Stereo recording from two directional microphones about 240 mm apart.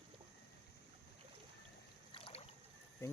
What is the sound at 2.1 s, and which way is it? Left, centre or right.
Boat, left.